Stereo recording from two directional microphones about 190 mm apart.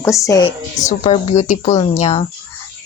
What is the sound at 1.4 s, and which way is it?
Speech, 35° left (ahead or behind).